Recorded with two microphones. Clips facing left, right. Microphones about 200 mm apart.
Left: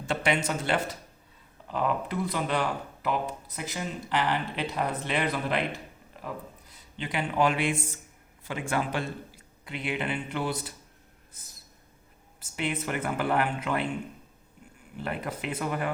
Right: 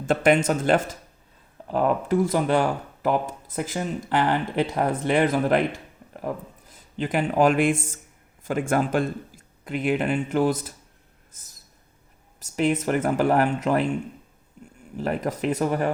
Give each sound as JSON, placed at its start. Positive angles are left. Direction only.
{"t": 0.0, "sound": "speech", "side_deg": -50}
{"t": 12.4, "sound": "speech", "side_deg": -40}
{"t": 14.9, "sound": "speech", "side_deg": -40}